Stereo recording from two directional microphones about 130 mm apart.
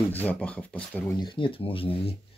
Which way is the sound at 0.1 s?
10° left (ahead or behind).